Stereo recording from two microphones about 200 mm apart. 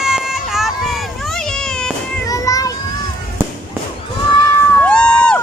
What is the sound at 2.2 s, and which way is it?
Music, 15° left (ahead or behind).